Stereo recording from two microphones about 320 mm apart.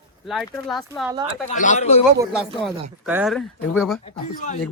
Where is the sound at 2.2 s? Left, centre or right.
Centre.